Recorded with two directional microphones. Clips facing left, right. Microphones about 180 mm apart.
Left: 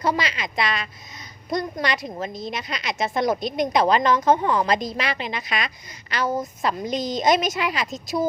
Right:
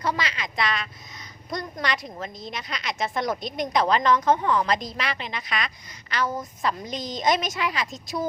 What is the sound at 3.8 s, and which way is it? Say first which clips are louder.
Speech: left 1 dB; 25° left (ahead or behind).